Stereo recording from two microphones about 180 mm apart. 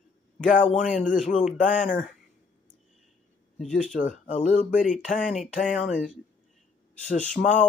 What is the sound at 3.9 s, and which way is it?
Speech, 45° left (ahead or behind).